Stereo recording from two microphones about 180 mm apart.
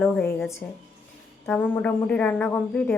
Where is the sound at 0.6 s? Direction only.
15° left (ahead or behind).